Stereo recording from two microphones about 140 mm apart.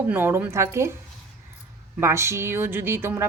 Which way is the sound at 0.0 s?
15° right (ahead or behind).